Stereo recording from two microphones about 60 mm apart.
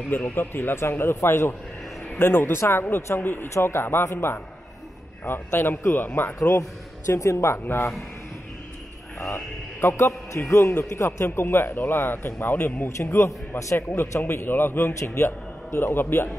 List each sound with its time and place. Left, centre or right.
0.3 s speech: left
6.5 s speech: left
9.8 s a man's voice: left
11.2 s speech: left
12.8 s a man's voice: left